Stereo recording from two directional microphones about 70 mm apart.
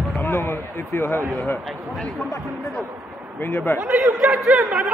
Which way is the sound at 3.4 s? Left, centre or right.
Left.